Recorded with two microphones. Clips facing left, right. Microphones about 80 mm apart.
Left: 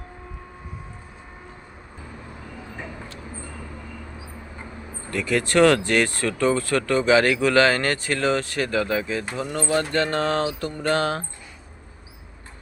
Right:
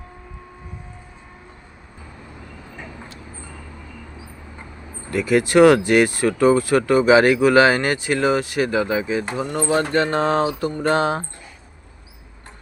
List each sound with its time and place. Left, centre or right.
5.1 s speech: centre